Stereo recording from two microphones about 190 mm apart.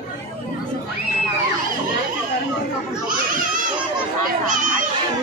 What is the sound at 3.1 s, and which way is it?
Children playing, 45° right (ahead or behind).